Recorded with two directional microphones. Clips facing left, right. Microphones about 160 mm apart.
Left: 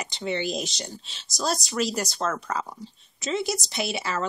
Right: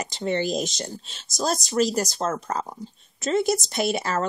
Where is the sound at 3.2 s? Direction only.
50° right (ahead or behind).